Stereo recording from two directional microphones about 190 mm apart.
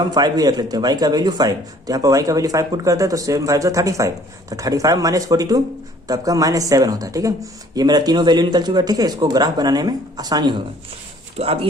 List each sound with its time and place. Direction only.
0.0 s speech: 20° right (ahead or behind)